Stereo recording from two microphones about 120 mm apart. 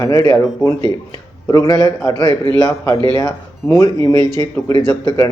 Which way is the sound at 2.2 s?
40° right (ahead or behind).